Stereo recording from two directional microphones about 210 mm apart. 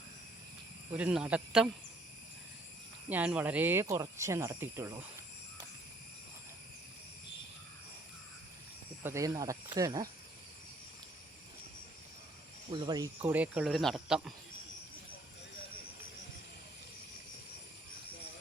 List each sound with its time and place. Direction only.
0.9 s speech: 5° right (ahead or behind)
3.1 s speech: 5° right (ahead or behind)
9.0 s speech: 15° right (ahead or behind)
12.7 s speech: 20° right (ahead or behind)
13.2 s speech: 10° right (ahead or behind)